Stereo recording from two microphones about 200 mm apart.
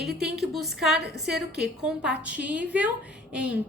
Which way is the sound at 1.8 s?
5° right (ahead or behind).